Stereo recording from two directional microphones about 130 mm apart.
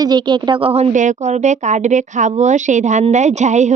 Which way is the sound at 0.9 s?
70° right (ahead or behind).